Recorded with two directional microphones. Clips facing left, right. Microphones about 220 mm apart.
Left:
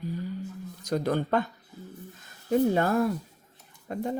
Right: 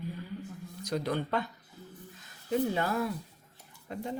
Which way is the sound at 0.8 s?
45° left (ahead or behind).